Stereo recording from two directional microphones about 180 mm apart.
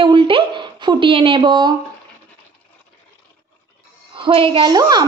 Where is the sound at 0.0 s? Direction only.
25° right (ahead or behind).